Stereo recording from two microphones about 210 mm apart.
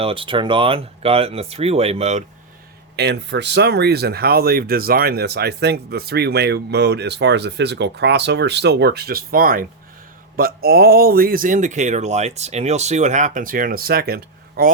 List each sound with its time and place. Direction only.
0.0 s speech: 25° right (ahead or behind)
2.9 s speech: 55° right (ahead or behind)